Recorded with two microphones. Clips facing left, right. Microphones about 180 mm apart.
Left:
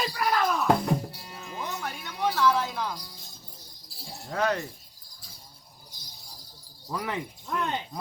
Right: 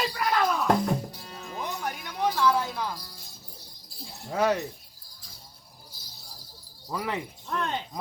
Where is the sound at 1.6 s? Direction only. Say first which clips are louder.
Right 2 dB; 15° right (ahead or behind).